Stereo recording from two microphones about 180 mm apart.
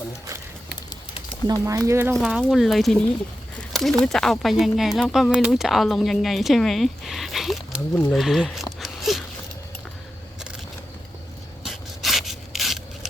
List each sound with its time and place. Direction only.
1.5 s speech: 15° right (ahead or behind)
2.1 s speech: 5° right (ahead or behind)
3.7 s a sound: centre (ahead or behind)
4.0 s speech: centre (ahead or behind)
8.8 s a sound: centre (ahead or behind)
11.6 s rub: centre (ahead or behind)